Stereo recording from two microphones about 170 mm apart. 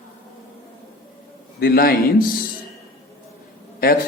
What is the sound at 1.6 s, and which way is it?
Speech, 60° left (ahead or behind).